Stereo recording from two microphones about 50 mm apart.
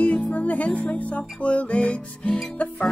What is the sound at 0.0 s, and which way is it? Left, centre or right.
Music, left.